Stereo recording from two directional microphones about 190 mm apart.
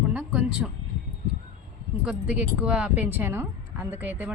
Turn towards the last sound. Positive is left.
turn(degrees=-10)  # may be behind; listen again after turning